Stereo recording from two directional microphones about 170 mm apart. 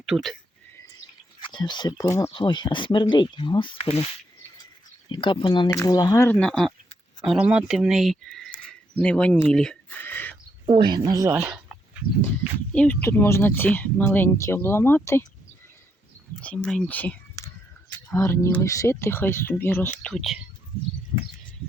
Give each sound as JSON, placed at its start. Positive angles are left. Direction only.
{"t": 0.0, "sound": "speech", "side_deg": 0}
{"t": 1.4, "sound": "speech", "side_deg": 30}
{"t": 2.3, "sound": "speech", "side_deg": 30}
{"t": 5.0, "sound": "speech", "side_deg": 30}
{"t": 6.2, "sound": "speech", "side_deg": 5}
{"t": 10.7, "sound": "speech", "side_deg": -30}
{"t": 12.7, "sound": "speech", "side_deg": 10}
{"t": 16.4, "sound": "speech", "side_deg": 10}